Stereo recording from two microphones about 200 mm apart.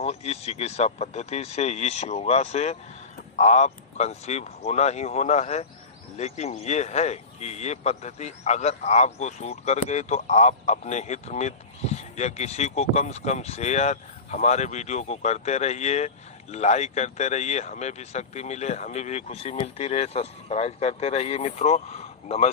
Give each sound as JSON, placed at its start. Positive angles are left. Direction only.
{"t": 0.0, "sound": "speech", "side_deg": 30}